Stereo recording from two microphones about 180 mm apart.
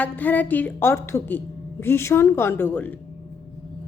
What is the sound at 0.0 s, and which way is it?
A woman's voice, 10° left (ahead or behind).